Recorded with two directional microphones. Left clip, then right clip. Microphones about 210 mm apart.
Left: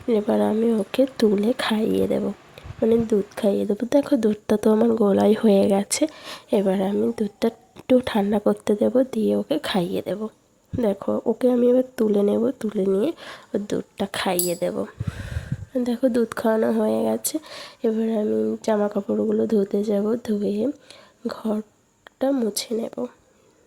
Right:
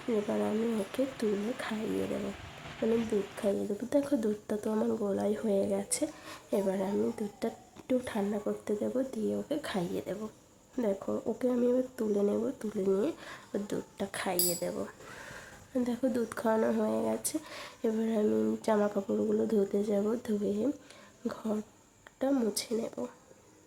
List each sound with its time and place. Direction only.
0.1 s speech: 40° left (ahead or behind)
3.3 s speech: 40° left (ahead or behind)